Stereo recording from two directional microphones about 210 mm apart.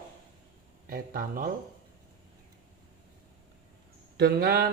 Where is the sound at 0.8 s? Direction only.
45° right (ahead or behind).